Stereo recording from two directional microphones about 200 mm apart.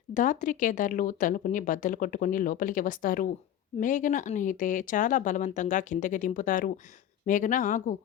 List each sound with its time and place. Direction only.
0.1 s speech: 40° left (ahead or behind)